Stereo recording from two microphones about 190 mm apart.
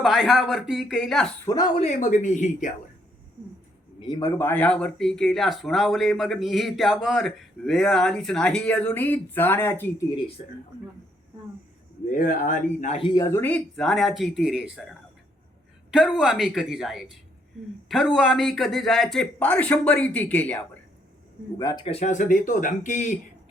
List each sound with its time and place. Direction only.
0.0 s speech: centre (ahead or behind)
1.5 s speech: 20° left (ahead or behind); by 2.7 s 40° left (ahead or behind)
4.0 s speech: 20° left (ahead or behind)
10.4 s speech: 40° left (ahead or behind)
12.0 s speech: 45° left (ahead or behind); by 14.8 s 5° right (ahead or behind)
15.9 s speech: 5° right (ahead or behind)
21.6 s speech: 20° left (ahead or behind)
21.8 s speech: 35° left (ahead or behind)